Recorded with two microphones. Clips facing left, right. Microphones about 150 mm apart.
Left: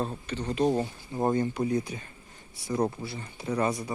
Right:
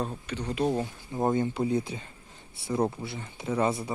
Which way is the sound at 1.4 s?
25° right (ahead or behind).